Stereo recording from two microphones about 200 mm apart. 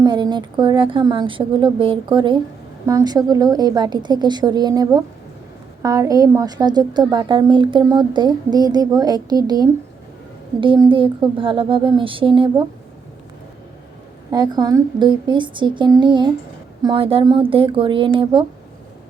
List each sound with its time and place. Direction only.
0.0 s a woman's voice: 20° right (ahead or behind)
14.3 s a woman's voice: 20° right (ahead or behind)